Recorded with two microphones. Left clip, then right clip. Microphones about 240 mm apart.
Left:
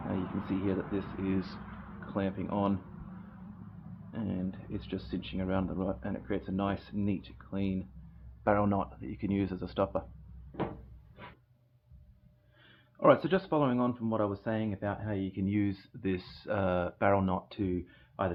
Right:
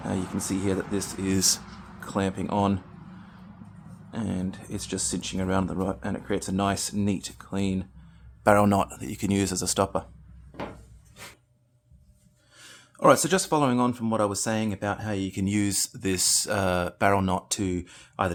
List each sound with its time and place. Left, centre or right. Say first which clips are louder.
0.1 s speech: right 5 dB; right
4.1 s speech: right 6 dB; right
13.0 s speech: right 5 dB; right